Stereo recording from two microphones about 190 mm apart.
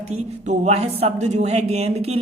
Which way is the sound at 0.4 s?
35° right (ahead or behind).